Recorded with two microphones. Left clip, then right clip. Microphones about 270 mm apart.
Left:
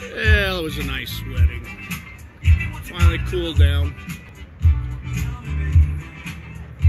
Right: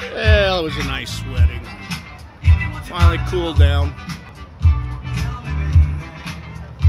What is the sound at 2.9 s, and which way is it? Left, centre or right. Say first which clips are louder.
Music: right 5 dB; centre.